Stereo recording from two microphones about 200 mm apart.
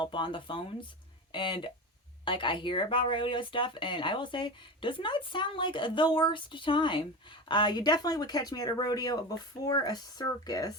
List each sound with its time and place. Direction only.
0.0 s speech: 25° left (ahead or behind)